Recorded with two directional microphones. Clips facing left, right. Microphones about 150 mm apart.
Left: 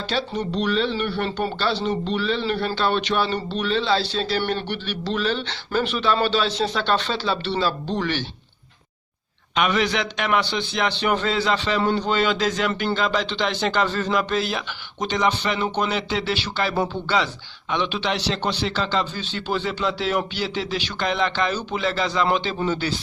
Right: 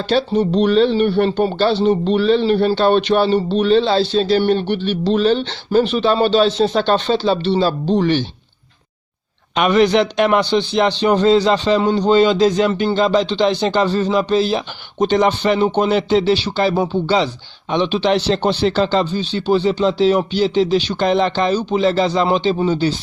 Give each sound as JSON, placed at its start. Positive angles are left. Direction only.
{"t": 0.3, "sound": "speech", "side_deg": -35}
{"t": 9.6, "sound": "speech", "side_deg": -40}
{"t": 11.8, "sound": "a man's voice", "side_deg": -15}
{"t": 12.3, "sound": "speech", "side_deg": -30}
{"t": 15.6, "sound": "speech", "side_deg": -30}
{"t": 19.1, "sound": "speech", "side_deg": -20}